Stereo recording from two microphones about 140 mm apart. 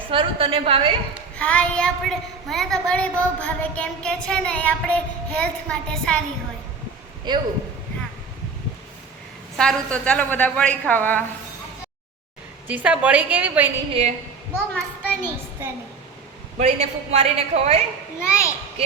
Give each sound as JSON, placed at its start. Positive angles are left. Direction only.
{"t": 0.1, "sound": "a woman's voice", "side_deg": -40}
{"t": 1.4, "sound": "a woman's voice", "side_deg": 10}
{"t": 7.3, "sound": "a woman's voice", "side_deg": -30}
{"t": 9.6, "sound": "a woman's voice", "side_deg": 5}
{"t": 12.6, "sound": "a woman's voice", "side_deg": -10}
{"t": 14.7, "sound": "a child's voice", "side_deg": 10}
{"t": 16.6, "sound": "a man's voice", "side_deg": -50}
{"t": 18.2, "sound": "a child's voice", "side_deg": 20}